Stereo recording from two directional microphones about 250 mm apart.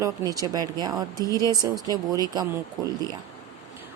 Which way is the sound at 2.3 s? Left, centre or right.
Centre.